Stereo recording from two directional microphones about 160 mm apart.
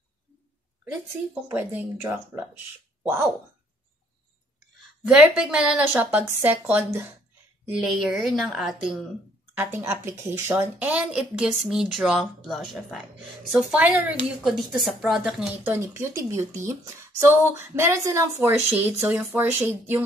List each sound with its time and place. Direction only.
1.5 s speech: 10° right (ahead or behind)
3.0 s a sound: 15° right (ahead or behind)
5.0 s a woman's voice: 5° right (ahead or behind)
9.5 s a woman's voice: 15° right (ahead or behind)
15.6 s speech: 15° right (ahead or behind)